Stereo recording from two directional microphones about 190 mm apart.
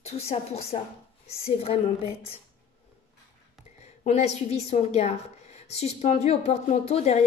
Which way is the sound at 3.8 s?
35° left (ahead or behind).